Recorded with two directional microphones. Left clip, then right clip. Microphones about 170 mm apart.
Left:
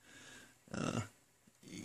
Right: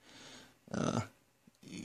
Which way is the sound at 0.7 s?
35° right (ahead or behind).